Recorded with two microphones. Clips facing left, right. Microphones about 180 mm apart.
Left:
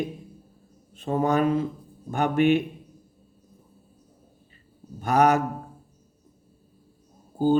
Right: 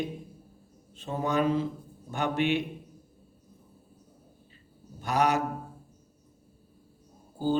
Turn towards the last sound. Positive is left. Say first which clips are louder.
# left 7 dB
turn(degrees=50)  # may be behind; listen again after turning